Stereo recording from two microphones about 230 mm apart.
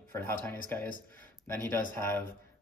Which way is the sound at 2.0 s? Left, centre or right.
Centre.